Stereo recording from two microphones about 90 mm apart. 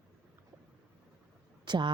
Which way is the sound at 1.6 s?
55° right (ahead or behind).